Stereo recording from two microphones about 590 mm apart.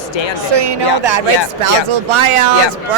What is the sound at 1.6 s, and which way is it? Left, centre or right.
Speech, right.